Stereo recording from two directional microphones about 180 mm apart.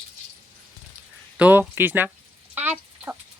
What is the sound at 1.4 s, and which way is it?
Speech, 10° right (ahead or behind).